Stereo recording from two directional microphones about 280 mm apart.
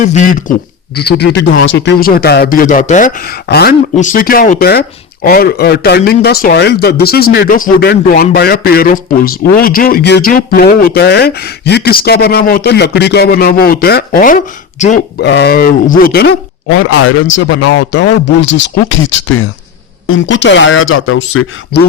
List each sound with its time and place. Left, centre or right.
0.0 s speech: left